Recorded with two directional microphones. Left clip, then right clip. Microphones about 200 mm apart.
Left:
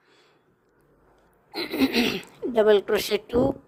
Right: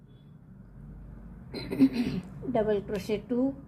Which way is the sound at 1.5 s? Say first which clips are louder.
Left 4 dB; 45° left (ahead or behind).